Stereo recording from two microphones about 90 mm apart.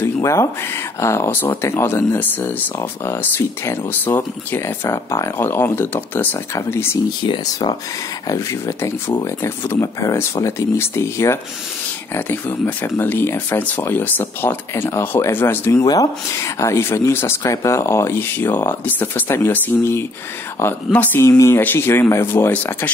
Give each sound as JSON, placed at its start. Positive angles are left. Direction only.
{"t": 0.0, "sound": "a sound", "side_deg": 30}
{"t": 0.9, "sound": "speech", "side_deg": 30}
{"t": 8.3, "sound": "speech", "side_deg": 35}
{"t": 20.9, "sound": "speech", "side_deg": 15}
{"t": 21.2, "sound": "speech", "side_deg": 35}